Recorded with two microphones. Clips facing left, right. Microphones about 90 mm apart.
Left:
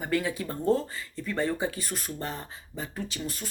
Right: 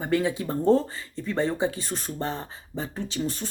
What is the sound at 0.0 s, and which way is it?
Speech, 25° right (ahead or behind).